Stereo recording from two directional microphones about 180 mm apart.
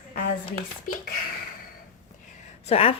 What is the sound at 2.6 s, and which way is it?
Speech, 35° left (ahead or behind).